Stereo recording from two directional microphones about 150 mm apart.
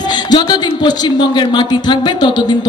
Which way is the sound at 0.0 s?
30° left (ahead or behind).